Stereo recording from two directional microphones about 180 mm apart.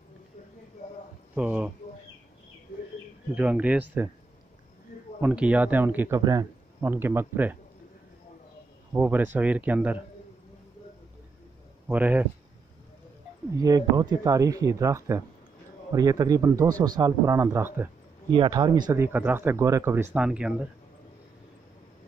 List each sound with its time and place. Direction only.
1.3 s speech: 5° right (ahead or behind)
3.3 s speech: 5° right (ahead or behind)
5.2 s speech: 5° right (ahead or behind)
8.9 s speech: 10° right (ahead or behind)
11.9 s speech: 10° right (ahead or behind)
13.6 s speech: 20° right (ahead or behind)
18.3 s speech: 25° right (ahead or behind); by 20.5 s 5° right (ahead or behind)